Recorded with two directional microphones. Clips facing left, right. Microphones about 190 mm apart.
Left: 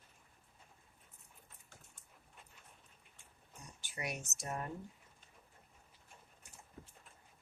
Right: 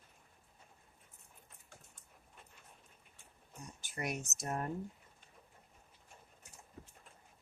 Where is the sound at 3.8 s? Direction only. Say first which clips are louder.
Right 3 dB; 45° right (ahead or behind).